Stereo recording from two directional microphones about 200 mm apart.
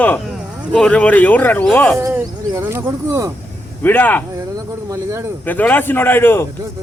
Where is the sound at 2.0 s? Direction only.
15° right (ahead or behind).